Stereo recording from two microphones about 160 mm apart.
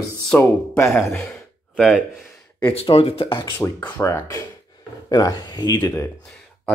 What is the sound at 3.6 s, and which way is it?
Speech, 10° left (ahead or behind).